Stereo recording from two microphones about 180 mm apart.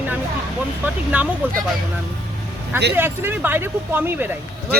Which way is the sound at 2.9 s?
10° right (ahead or behind).